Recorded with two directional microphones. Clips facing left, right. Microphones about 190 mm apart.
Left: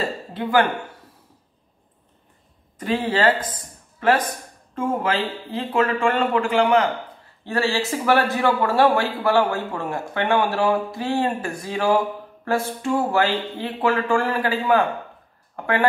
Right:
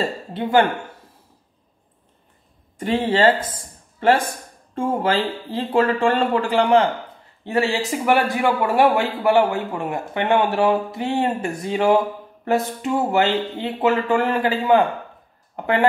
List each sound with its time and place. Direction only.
0.3 s a man's voice: 25° right (ahead or behind)
2.8 s speech: 25° right (ahead or behind)
7.4 s a man's voice: 20° right (ahead or behind)